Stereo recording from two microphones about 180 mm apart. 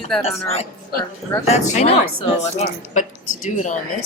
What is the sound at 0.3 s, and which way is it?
Speech, 35° left (ahead or behind).